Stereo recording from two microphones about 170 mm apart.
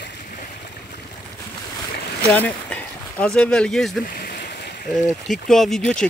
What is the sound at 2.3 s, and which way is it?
Speech, 5° left (ahead or behind).